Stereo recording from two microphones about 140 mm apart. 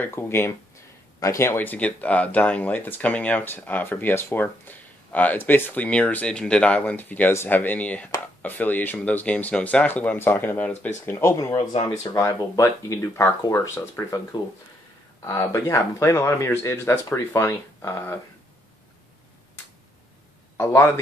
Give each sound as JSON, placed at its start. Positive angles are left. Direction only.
{"t": 0.0, "sound": "speech", "side_deg": 20}
{"t": 15.2, "sound": "speech", "side_deg": 20}
{"t": 20.5, "sound": "a man's voice", "side_deg": 20}